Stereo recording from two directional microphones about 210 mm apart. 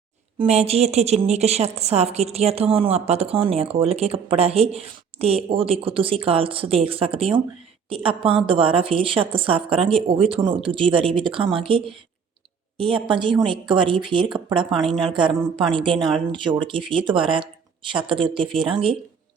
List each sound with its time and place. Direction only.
0.3 s a woman's voice: 30° right (ahead or behind)
14.7 s a woman's voice: centre (ahead or behind)
14.9 s a woman's voice: 25° right (ahead or behind)